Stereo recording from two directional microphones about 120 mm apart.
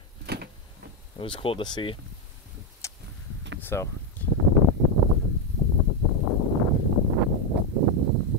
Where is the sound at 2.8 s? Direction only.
25° left (ahead or behind).